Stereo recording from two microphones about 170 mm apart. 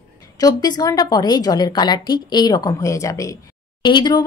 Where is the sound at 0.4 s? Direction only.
20° left (ahead or behind).